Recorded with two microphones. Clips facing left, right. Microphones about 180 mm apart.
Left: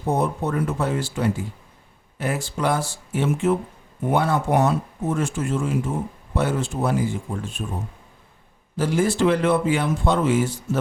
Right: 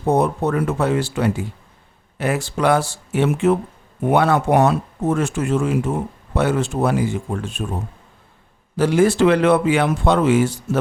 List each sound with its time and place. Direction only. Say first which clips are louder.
0.0 s speech: right 5 dB; 75° right (ahead or behind)
8.7 s speech: right 6 dB; 75° right (ahead or behind)